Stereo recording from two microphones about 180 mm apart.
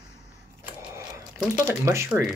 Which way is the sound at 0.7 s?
15° right (ahead or behind).